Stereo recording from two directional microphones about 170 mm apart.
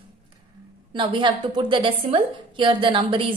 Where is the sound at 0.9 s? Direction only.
30° right (ahead or behind).